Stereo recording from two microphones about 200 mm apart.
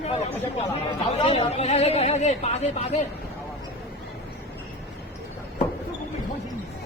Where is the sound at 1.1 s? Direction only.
30° left (ahead or behind).